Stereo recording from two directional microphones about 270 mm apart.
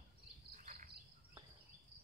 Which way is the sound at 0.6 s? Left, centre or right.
Right.